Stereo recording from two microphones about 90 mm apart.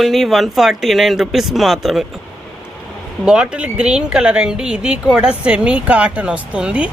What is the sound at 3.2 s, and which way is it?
Speech, 10° right (ahead or behind).